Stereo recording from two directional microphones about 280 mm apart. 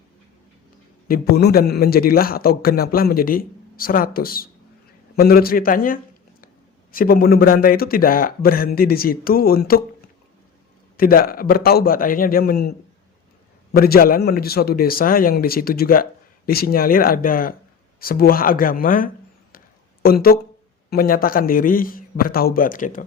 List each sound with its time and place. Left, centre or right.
1.0 s a man's voice: left
10.9 s a man's voice: left
13.7 s a man's voice: left
19.5 s a sound: left
20.9 s a man's voice: left